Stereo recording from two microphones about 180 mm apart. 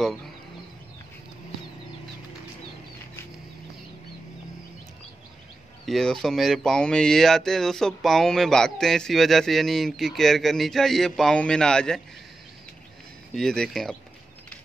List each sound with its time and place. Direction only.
5.9 s speech: centre (ahead or behind)
13.3 s speech: 5° left (ahead or behind)